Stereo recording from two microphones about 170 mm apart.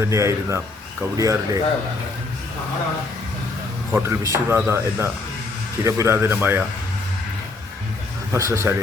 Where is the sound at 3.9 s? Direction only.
15° right (ahead or behind).